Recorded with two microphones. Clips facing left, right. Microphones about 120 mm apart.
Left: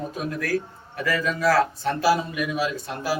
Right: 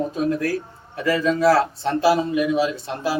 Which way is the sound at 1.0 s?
25° right (ahead or behind).